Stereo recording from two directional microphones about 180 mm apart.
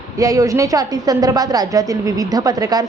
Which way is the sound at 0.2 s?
20° right (ahead or behind).